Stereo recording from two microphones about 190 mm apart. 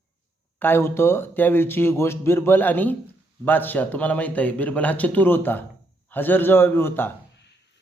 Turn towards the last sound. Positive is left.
turn(degrees=10)  # may be behind; listen again after turning